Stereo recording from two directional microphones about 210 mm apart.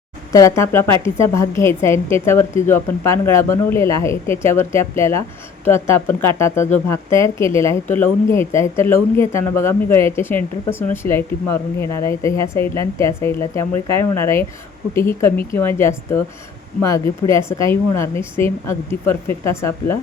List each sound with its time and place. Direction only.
0.3 s speech: 15° left (ahead or behind)